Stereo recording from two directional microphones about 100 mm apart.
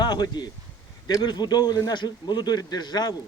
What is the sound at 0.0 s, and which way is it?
A man's voice, 45° left (ahead or behind).